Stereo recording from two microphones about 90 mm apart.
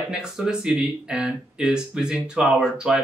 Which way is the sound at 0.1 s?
10° right (ahead or behind).